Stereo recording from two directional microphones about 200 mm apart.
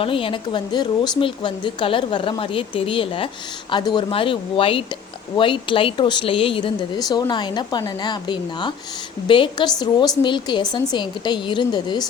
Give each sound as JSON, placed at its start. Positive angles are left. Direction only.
{"t": 0.0, "sound": "speech", "side_deg": 25}